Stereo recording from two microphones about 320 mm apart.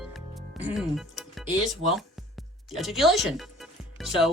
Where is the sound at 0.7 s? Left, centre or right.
Centre.